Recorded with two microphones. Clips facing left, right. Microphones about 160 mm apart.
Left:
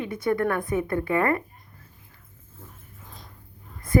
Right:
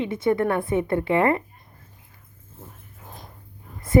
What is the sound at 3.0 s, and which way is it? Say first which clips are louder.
Dog: right 5 dB; 55° right (ahead or behind).